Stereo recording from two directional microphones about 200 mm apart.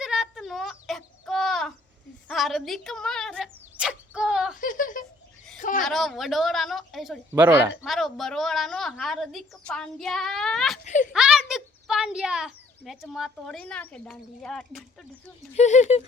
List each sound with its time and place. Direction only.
0.0 s chicken: 5° right (ahead or behind)
2.2 s a sound: centre (ahead or behind)
4.6 s a sound: 40° left (ahead or behind)
5.8 s a woman's voice: centre (ahead or behind)
10.8 s speech: 40° left (ahead or behind)
11.1 s a child's voice: centre (ahead or behind)
15.5 s speech: 35° left (ahead or behind)